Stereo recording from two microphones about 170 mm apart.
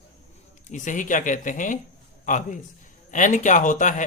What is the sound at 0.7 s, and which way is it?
A man's voice, 50° left (ahead or behind).